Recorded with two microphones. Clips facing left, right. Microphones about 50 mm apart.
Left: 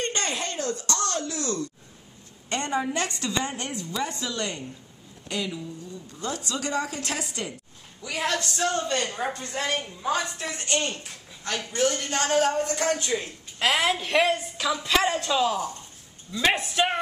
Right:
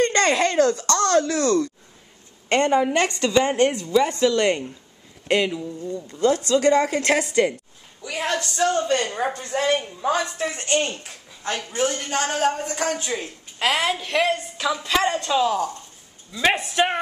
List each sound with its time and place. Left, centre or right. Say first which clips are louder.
0.0 s a sound: right 10 dB; right
0.8 s a woman's voice: right 9 dB; right
2.5 s a woman's voice: right 8 dB; right
4.1 s a woman's voice: right 12 dB; right
8.1 s a man's voice: right 2 dB; centre
10.4 s speech: right 5 dB; right
13.1 s a woman's voice: even; centre